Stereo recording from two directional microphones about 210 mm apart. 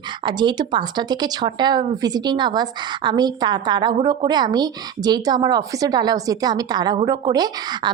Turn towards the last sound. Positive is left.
turn(degrees=-20)  # may be behind; listen again after turning